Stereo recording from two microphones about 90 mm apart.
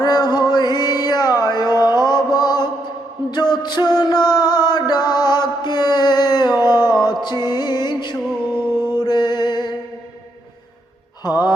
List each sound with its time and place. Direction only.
0.0 s music: 50° left (ahead or behind)
6.6 s a sound: 50° left (ahead or behind)
6.9 s music: 55° left (ahead or behind)
8.5 s a sound: 25° right (ahead or behind)
9.0 s music: 50° left (ahead or behind)
11.2 s music: 50° left (ahead or behind)